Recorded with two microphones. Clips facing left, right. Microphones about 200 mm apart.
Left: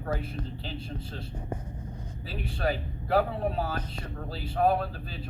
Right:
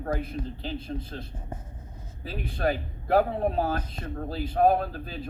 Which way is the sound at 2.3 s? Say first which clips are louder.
Right 3 dB; 45° right (ahead or behind).